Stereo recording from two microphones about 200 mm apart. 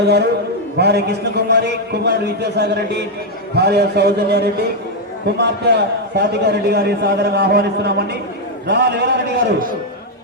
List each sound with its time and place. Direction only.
0.0 s a man's voice: 55° right (ahead or behind)